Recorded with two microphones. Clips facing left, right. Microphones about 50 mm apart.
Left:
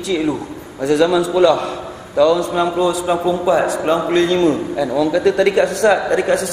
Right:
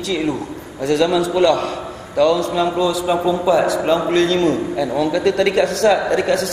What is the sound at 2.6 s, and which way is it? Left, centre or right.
Speech, left.